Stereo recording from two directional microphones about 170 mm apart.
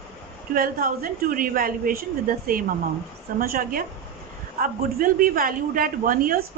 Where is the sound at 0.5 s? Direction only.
55° right (ahead or behind).